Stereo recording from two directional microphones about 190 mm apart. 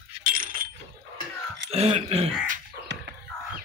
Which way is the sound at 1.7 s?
30° right (ahead or behind).